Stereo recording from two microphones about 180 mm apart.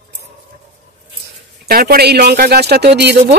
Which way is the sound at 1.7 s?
55° right (ahead or behind).